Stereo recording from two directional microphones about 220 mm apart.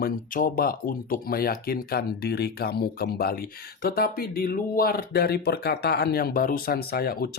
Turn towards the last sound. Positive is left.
turn(degrees=45)  # may be behind; listen again after turning